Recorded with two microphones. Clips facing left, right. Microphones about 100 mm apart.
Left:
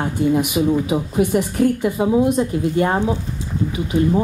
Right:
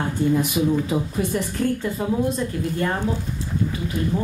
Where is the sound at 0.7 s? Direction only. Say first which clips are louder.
Left 4 dB; 15° left (ahead or behind).